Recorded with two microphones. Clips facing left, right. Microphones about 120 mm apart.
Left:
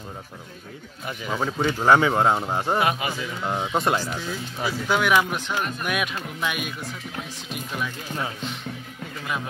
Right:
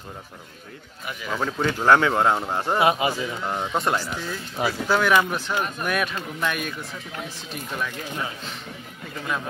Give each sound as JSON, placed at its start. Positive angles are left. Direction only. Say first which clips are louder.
{"t": 1.3, "sound": "speech", "louder": "even", "side_deg": 10}
{"t": 2.8, "sound": "a man's voice", "louder": "right 4 dB", "side_deg": -25}
{"t": 3.4, "sound": "speech", "louder": "left 2 dB", "side_deg": 5}